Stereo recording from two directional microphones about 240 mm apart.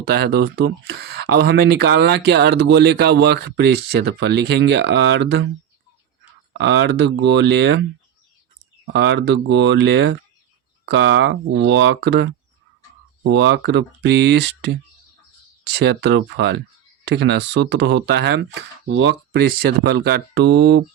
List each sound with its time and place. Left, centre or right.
0.0 s speech: right
6.5 s speech: right
8.9 s speech: right